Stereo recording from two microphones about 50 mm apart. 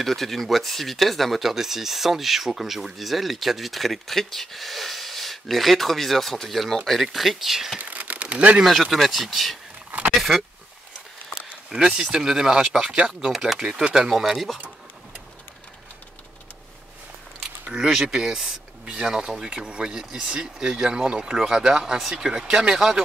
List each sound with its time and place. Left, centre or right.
0.0 s speech: centre
7.8 s a sound: right
8.6 s speech: centre
9.8 s vehicle: right
11.7 s speech: centre
13.6 s speech: centre
17.8 s speech: centre